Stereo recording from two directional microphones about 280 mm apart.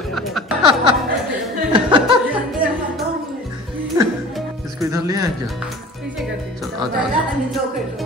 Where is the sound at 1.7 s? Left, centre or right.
Centre.